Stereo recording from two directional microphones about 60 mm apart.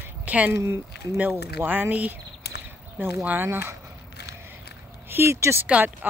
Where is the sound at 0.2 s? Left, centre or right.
Right.